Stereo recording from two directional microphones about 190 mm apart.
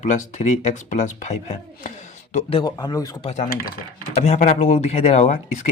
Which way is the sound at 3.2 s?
40° left (ahead or behind).